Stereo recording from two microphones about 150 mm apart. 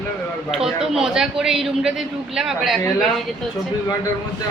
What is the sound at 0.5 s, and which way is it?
A man's voice, centre (ahead or behind).